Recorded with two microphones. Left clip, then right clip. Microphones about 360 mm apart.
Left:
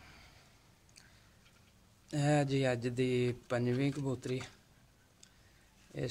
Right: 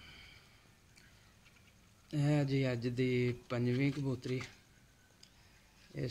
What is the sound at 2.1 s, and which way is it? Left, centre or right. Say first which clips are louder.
Speech: left 3 dB; left.